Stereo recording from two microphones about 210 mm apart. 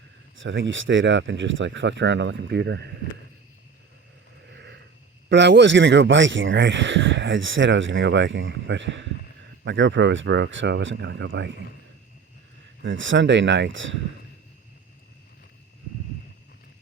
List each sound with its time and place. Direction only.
0.3 s speech: 65° right (ahead or behind)
4.5 s a sound: 55° right (ahead or behind)
5.3 s speech: 55° right (ahead or behind)
12.8 s speech: 65° right (ahead or behind)